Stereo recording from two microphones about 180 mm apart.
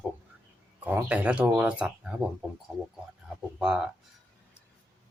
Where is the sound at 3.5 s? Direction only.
5° right (ahead or behind).